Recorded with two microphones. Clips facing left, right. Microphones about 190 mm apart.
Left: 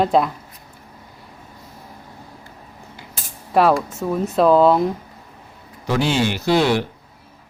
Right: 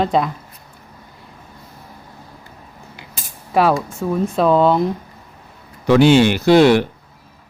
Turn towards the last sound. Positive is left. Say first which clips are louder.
# right 6 dB
turn(degrees=-65)  # may be behind; listen again after turning